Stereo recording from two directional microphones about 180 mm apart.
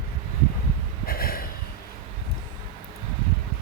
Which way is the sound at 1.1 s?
55° left (ahead or behind).